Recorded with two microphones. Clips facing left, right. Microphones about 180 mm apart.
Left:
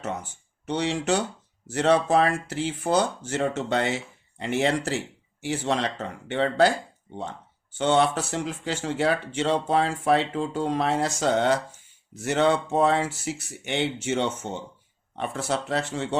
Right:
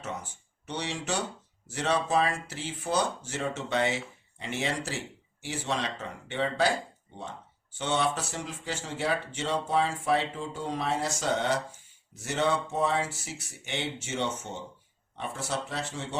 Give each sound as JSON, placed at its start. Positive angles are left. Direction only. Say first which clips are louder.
{"t": 0.6, "sound": "speech", "louder": "left 8 dB", "side_deg": 60}
{"t": 7.8, "sound": "speech", "louder": "left 7 dB", "side_deg": 65}